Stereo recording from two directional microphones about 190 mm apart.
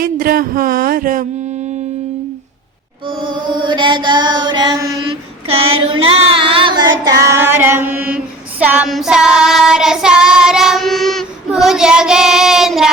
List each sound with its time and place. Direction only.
0.0 s speech: 50° right (ahead or behind)
3.1 s chant: 25° right (ahead or behind)
5.9 s a sound: 30° right (ahead or behind)
7.3 s female singing: 10° right (ahead or behind)